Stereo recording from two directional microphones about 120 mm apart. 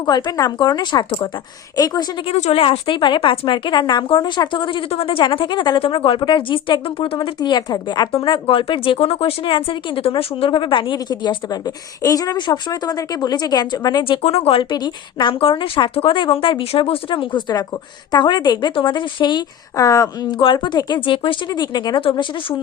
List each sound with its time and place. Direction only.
0.0 s speech: 40° left (ahead or behind)
2.2 s a woman's voice: 60° left (ahead or behind); by 8.1 s 35° left (ahead or behind)
8.1 s speech: 45° left (ahead or behind)
14.0 s a woman's voice: 55° left (ahead or behind)